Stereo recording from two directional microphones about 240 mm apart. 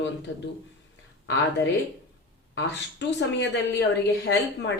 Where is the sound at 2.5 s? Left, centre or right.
Left.